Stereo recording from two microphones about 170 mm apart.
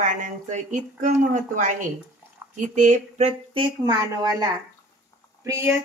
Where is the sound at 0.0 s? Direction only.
45° right (ahead or behind).